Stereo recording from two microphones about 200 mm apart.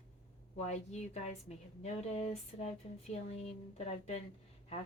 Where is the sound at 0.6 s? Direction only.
35° left (ahead or behind).